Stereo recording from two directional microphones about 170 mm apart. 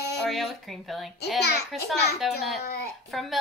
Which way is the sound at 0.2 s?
Centre (ahead or behind).